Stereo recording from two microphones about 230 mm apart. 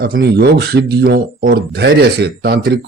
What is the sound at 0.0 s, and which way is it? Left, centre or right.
A man's voice, right.